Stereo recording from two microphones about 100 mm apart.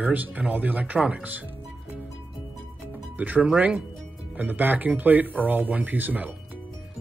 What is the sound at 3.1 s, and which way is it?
Speech, 15° right (ahead or behind).